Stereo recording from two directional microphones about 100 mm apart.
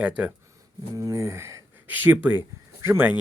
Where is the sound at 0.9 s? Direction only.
30° right (ahead or behind).